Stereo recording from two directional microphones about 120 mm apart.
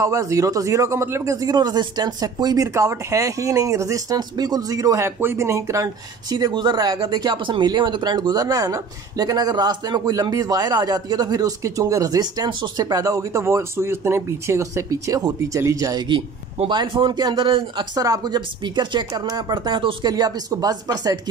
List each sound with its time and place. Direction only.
0.0 s speech: 25° right (ahead or behind)
6.3 s speech: 35° right (ahead or behind)
16.6 s speech: 40° right (ahead or behind)